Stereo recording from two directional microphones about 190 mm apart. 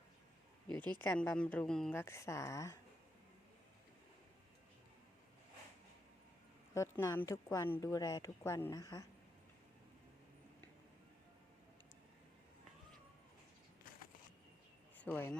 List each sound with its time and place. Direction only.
1.0 s a woman's voice: 10° left (ahead or behind)
6.7 s a woman's voice: 15° left (ahead or behind)
15.0 s a woman's voice: 10° left (ahead or behind)